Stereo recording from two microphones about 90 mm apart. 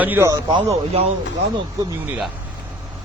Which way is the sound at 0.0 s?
20° right (ahead or behind).